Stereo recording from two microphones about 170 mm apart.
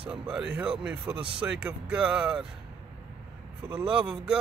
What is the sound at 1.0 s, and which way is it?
Speech, 30° right (ahead or behind).